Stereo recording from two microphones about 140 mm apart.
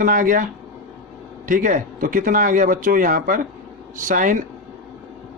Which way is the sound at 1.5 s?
75° right (ahead or behind).